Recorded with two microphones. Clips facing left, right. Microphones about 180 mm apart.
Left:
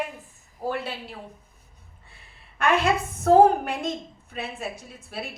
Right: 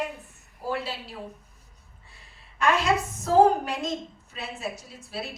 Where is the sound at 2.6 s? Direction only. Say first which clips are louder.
Left 1 dB; 55° left (ahead or behind).